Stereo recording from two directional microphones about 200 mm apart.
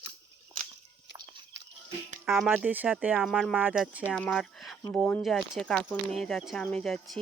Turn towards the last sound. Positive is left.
turn(degrees=0)  # may be behind; listen again after turning